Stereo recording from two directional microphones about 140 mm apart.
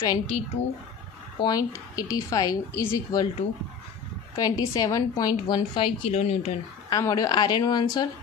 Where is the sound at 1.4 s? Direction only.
30° left (ahead or behind).